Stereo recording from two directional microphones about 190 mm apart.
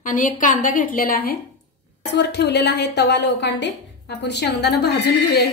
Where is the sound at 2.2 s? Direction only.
60° left (ahead or behind).